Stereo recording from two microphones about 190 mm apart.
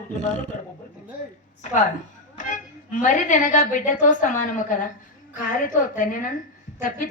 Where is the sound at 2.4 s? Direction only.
40° left (ahead or behind).